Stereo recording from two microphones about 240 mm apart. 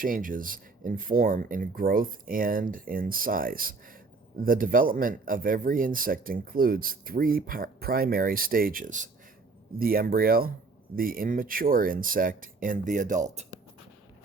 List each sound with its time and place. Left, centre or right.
0.0 s speech: right